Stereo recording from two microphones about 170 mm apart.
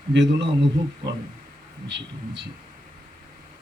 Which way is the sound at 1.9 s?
90° right.